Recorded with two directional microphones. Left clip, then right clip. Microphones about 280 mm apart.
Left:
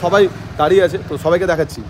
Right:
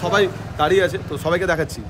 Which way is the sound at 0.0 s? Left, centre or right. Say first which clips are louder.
Left 5 dB; centre.